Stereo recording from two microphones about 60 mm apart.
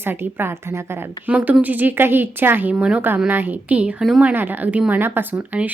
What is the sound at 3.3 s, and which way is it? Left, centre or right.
Speech, right.